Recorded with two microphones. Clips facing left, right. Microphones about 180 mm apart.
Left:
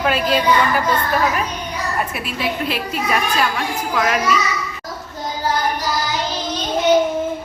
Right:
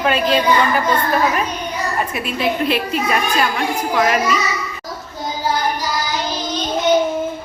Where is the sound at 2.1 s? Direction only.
5° left (ahead or behind).